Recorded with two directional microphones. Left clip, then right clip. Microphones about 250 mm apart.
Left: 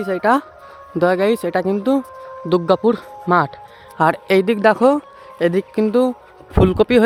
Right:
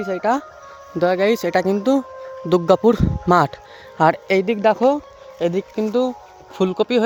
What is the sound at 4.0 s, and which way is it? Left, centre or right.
Speech, centre.